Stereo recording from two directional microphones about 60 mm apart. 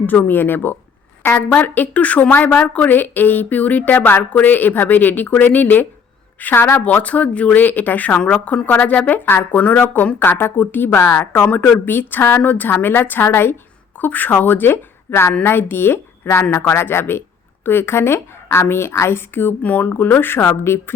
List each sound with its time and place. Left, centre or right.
0.0 s a woman's voice: left
1.5 s a woman's voice: left
6.8 s speech: left
8.2 s a woman's voice: centre
8.6 s a woman's voice: left